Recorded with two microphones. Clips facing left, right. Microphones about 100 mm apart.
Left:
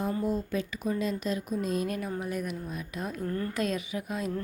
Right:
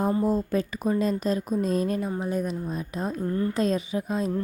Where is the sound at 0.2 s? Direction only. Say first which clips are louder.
Right 6 dB; 40° right (ahead or behind).